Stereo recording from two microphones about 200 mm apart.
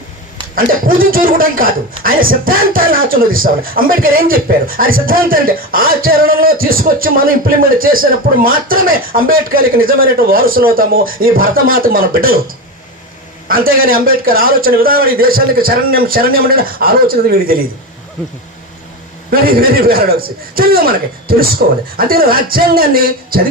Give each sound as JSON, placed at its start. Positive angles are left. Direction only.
{"t": 0.5, "sound": "speech", "side_deg": -45}
{"t": 13.5, "sound": "speech", "side_deg": -45}
{"t": 19.3, "sound": "speech", "side_deg": -45}